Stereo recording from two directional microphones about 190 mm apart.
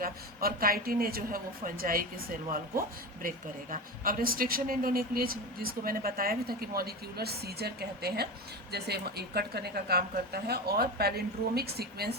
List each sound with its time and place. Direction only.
0.0 s a man's voice: 50° right (ahead or behind)